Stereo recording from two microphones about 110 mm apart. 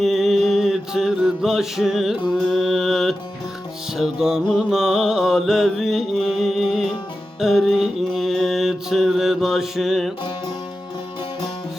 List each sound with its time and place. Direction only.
0.0 s mantra: centre (ahead or behind)